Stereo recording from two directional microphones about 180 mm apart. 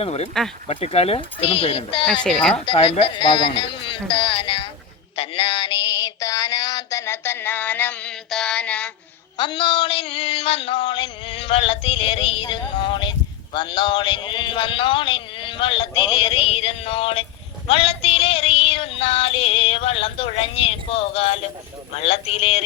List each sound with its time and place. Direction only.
0.0 s speech: 35° left (ahead or behind)
3.5 s a sound: 30° left (ahead or behind)
5.1 s music: 30° left (ahead or behind); by 8.9 s 5° left (ahead or behind)
9.4 s a sound: 25° left (ahead or behind)
17.7 s female singing: 30° left (ahead or behind)
21.9 s speech: 35° left (ahead or behind)